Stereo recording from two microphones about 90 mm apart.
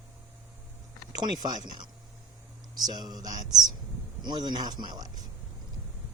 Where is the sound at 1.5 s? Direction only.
50° right (ahead or behind).